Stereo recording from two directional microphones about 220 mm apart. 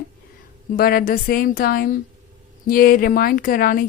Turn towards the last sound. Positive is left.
turn(degrees=40)  # may be behind; listen again after turning